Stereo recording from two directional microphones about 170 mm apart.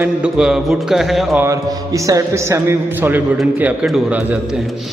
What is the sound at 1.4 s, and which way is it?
A man's voice, 20° right (ahead or behind).